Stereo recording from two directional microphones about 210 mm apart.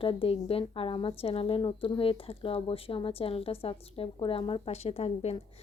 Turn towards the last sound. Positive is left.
turn(degrees=30)  # may be behind; listen again after turning